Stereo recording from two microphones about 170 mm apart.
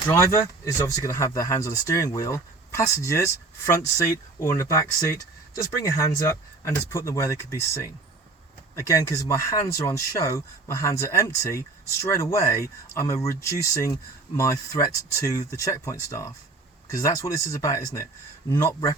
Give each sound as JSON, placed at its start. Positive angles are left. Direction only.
{"t": 0.1, "sound": "speech", "side_deg": 15}